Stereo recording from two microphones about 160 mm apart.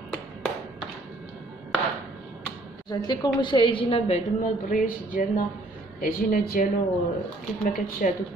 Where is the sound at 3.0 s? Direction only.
25° left (ahead or behind).